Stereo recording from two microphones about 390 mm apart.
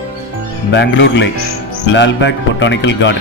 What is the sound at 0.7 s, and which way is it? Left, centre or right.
Speech, left.